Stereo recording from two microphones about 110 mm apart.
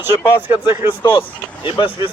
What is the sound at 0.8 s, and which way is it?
A man's voice, 50° left (ahead or behind).